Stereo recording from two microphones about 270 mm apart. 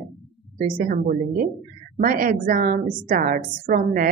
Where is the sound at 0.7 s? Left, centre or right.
Right.